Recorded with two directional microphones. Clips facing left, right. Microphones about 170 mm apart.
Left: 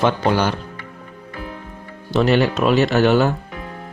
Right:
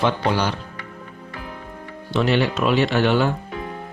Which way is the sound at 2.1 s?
45° left (ahead or behind).